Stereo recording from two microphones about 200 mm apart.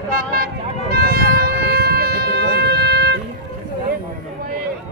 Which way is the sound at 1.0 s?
50° right (ahead or behind).